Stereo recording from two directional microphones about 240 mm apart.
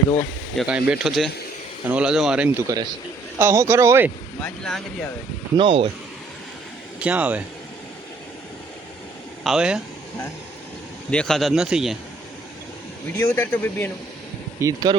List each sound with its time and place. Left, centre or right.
0.2 s speech: centre
4.4 s speech: centre
5.5 s speech: right
7.0 s speech: centre
9.4 s speech: centre
11.1 s speech: centre
13.1 s speech: centre
14.6 s speech: centre